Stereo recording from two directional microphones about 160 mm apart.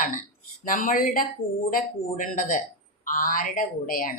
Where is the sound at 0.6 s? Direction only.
55° left (ahead or behind).